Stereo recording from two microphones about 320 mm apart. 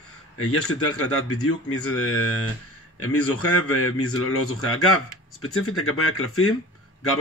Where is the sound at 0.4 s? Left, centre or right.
Left.